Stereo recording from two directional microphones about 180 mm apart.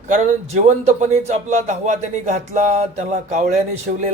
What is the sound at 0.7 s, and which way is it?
Speech, 40° right (ahead or behind).